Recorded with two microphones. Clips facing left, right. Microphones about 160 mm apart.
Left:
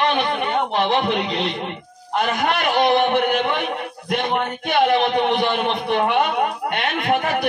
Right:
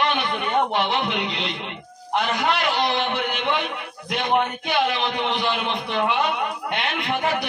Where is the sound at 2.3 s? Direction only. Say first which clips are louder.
Left 4 dB; 50° left (ahead or behind).